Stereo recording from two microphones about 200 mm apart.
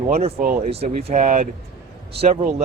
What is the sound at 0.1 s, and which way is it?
Speech, 30° right (ahead or behind).